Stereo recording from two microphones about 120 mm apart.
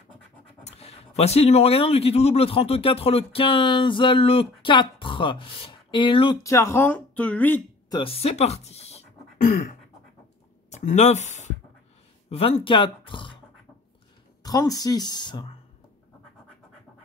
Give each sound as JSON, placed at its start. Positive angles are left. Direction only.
{"t": 0.7, "sound": "a man's voice", "side_deg": 60}
{"t": 6.4, "sound": "speech", "side_deg": 25}
{"t": 7.9, "sound": "speech", "side_deg": 50}
{"t": 10.7, "sound": "speech", "side_deg": 75}
{"t": 12.3, "sound": "a man's voice", "side_deg": 55}
{"t": 14.4, "sound": "speech", "side_deg": 30}